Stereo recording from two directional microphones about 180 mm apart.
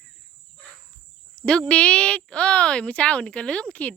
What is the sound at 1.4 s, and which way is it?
Speech, 5° left (ahead or behind).